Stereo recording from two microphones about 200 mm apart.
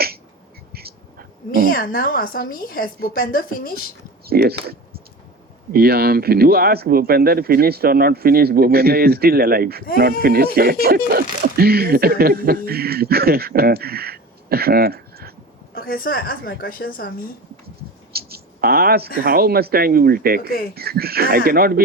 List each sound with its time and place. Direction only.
0.7 s a sound: 50° right (ahead or behind)
1.7 s a woman's voice: 45° left (ahead or behind)
4.3 s speech: 50° right (ahead or behind)
15.7 s a woman's voice: 45° left (ahead or behind)
18.1 s a sound: 50° right (ahead or behind)
19.2 s speech: 50° right (ahead or behind)
20.4 s a woman's voice: 45° left (ahead or behind)
20.7 s speech: 50° right (ahead or behind)